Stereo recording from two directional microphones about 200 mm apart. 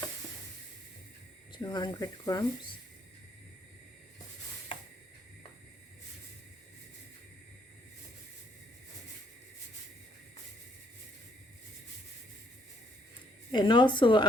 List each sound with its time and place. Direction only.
1.5 s speech: 20° left (ahead or behind)
13.5 s speech: 25° left (ahead or behind)